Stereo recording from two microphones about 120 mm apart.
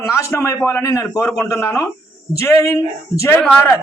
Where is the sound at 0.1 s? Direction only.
20° left (ahead or behind).